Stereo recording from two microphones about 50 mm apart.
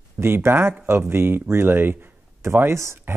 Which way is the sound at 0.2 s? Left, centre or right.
Right.